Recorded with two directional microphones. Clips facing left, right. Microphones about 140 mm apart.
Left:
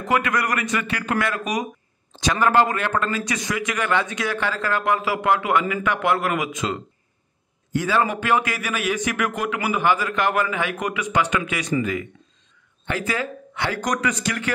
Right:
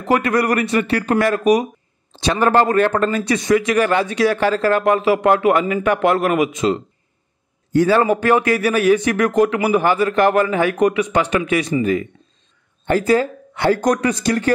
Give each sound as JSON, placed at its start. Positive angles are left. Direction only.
{"t": 0.0, "sound": "a man's voice", "side_deg": -35}